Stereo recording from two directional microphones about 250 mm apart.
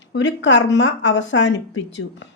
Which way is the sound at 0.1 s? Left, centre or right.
Left.